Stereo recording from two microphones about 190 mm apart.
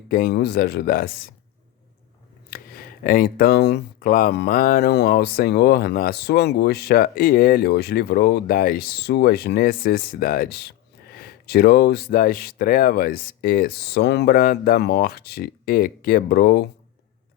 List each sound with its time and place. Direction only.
0.1 s speech: 55° left (ahead or behind)
2.5 s speech: 50° left (ahead or behind)